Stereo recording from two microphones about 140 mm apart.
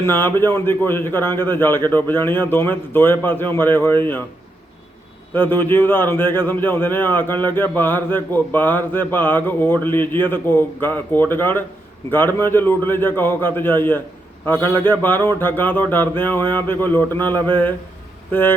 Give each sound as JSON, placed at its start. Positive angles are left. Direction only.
{"t": 0.0, "sound": "speech", "side_deg": 15}
{"t": 5.3, "sound": "speech", "side_deg": 15}